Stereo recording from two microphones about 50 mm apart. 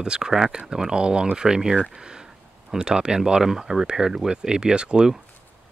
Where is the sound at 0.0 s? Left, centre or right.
Centre.